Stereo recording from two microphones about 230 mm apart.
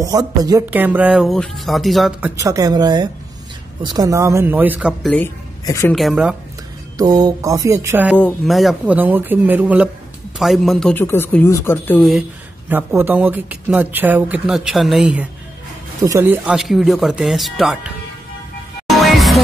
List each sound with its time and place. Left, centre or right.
0.0 s speech: centre
2.4 s speech: centre
5.9 s speech: centre
7.0 s speech: centre
8.2 s speech: centre
12.6 s speech: centre
18.9 s music: centre